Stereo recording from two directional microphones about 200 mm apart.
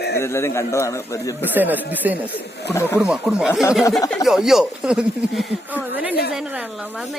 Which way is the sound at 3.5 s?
15° left (ahead or behind).